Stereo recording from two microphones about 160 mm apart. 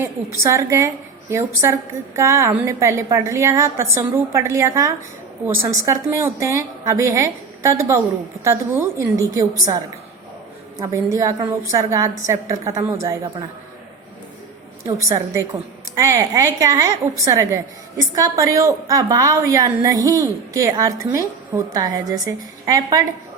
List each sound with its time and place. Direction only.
0.3 s a woman's voice: 20° right (ahead or behind)
10.8 s a woman's voice: 20° right (ahead or behind)
14.8 s a woman's voice: 20° right (ahead or behind)